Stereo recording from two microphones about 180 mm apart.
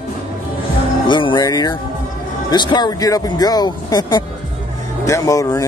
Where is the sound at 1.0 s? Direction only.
25° left (ahead or behind).